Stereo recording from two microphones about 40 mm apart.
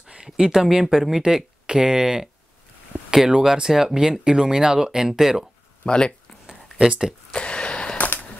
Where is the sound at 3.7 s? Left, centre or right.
Centre.